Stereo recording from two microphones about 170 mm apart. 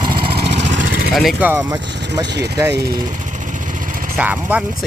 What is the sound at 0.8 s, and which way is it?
Vehicle, 60° right (ahead or behind).